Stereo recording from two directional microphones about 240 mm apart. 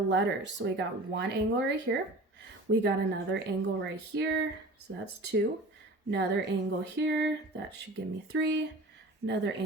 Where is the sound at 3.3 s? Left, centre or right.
Right.